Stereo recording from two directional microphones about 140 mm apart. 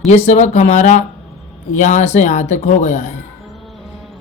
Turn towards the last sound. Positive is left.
turn(degrees=55)  # may be behind; listen again after turning